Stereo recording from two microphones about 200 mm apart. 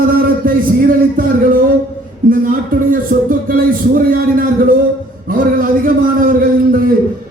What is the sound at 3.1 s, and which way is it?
A man's voice, 45° right (ahead or behind).